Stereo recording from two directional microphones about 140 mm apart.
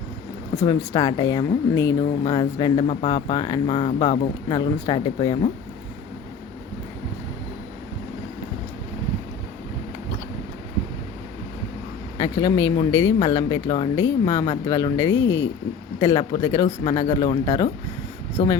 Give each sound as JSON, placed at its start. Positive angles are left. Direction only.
{"t": 0.5, "sound": "speech", "side_deg": 25}
{"t": 12.1, "sound": "speech", "side_deg": 25}